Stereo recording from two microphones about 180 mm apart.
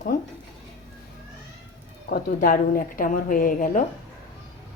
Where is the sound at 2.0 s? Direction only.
55° left (ahead or behind).